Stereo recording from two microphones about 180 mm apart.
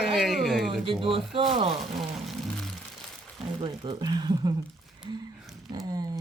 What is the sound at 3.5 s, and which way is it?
Speech, 30° right (ahead or behind).